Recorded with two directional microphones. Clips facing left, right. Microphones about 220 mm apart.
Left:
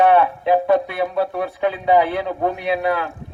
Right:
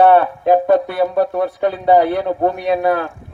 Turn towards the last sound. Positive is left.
turn(degrees=-50)  # may be behind; listen again after turning